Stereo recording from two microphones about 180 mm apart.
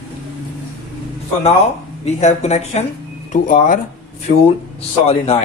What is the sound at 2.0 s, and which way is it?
Speech, 40° left (ahead or behind).